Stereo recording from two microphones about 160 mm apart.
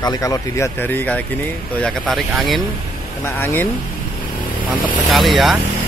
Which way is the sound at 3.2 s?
15° left (ahead or behind).